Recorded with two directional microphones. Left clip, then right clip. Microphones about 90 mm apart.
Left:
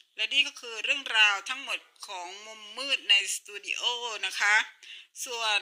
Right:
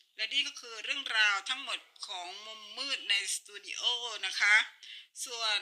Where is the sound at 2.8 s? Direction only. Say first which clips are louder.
Left 7 dB; 35° left (ahead or behind).